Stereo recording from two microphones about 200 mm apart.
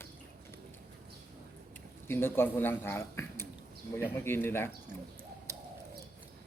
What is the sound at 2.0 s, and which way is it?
A man's voice, 10° left (ahead or behind).